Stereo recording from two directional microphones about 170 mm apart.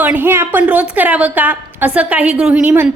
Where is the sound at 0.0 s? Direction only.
10° right (ahead or behind).